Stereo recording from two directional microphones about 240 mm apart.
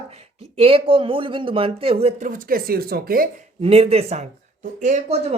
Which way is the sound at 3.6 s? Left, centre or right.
Right.